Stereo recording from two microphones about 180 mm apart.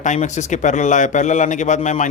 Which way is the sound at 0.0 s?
40° left (ahead or behind).